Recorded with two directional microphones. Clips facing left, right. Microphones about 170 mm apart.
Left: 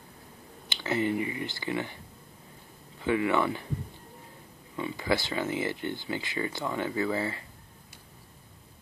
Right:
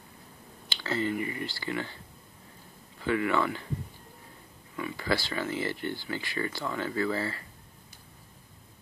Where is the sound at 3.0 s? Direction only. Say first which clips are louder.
Left 1 dB; 20° left (ahead or behind).